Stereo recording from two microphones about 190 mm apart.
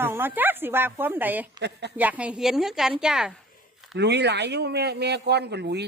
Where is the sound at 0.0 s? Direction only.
10° right (ahead or behind).